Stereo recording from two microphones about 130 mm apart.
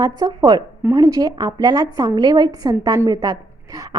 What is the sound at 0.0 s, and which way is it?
A woman's voice, 30° right (ahead or behind).